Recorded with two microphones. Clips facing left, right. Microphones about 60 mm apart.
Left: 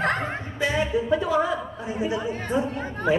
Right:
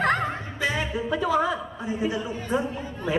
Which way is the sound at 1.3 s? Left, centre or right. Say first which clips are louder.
Even; left.